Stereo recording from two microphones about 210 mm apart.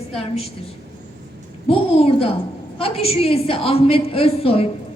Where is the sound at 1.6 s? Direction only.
25° left (ahead or behind).